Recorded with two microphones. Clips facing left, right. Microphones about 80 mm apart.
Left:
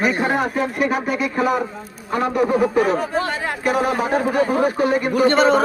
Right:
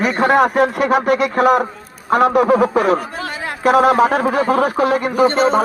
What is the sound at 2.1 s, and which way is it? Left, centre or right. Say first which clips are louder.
Speech: right 6 dB; right.